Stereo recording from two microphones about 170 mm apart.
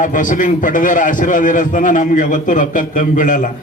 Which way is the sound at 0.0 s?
50° left (ahead or behind).